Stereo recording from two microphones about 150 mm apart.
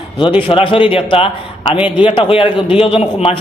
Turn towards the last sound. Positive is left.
turn(degrees=40)  # may be behind; listen again after turning